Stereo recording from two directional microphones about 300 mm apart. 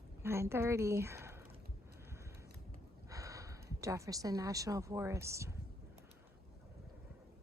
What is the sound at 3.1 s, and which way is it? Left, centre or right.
A woman's voice, centre.